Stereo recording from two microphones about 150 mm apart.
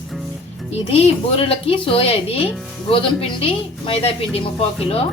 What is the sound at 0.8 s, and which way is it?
A woman's voice, 40° left (ahead or behind).